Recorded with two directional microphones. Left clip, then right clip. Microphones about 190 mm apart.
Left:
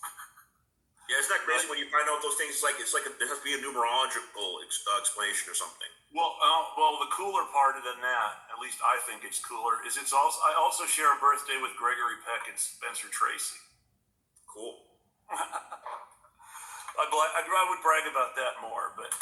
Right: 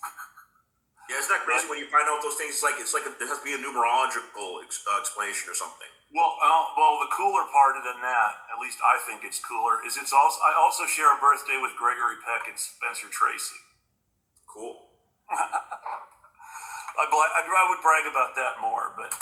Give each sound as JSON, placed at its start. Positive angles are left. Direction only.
{"t": 1.1, "sound": "a man's voice", "side_deg": -40}
{"t": 11.0, "sound": "a man's voice", "side_deg": -25}
{"t": 11.3, "sound": "a man's voice", "side_deg": -35}
{"t": 15.3, "sound": "a sound", "side_deg": -40}
{"t": 16.5, "sound": "a man's voice", "side_deg": -35}